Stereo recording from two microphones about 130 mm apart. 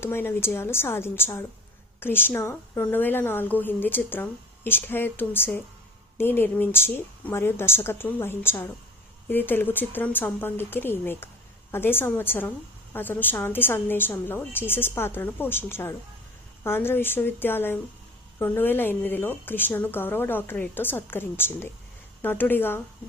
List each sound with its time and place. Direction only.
0.0 s a woman's voice: 15° left (ahead or behind)